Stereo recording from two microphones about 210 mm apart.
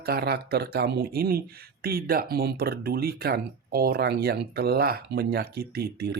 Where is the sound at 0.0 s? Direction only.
50° right (ahead or behind).